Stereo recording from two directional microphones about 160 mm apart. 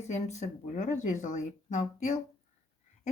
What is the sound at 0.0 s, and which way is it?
Speech, 45° left (ahead or behind).